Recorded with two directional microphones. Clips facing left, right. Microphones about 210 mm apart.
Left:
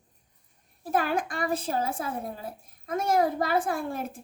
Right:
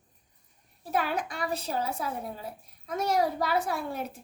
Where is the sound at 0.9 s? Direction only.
50° left (ahead or behind).